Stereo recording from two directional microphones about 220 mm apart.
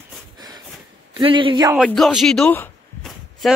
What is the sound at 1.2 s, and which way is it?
Speech, 20° right (ahead or behind).